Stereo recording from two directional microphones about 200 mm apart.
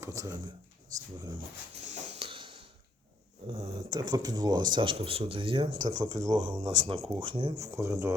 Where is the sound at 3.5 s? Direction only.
20° right (ahead or behind).